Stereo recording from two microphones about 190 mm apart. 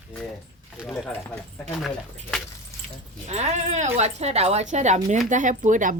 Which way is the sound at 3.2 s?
35° right (ahead or behind).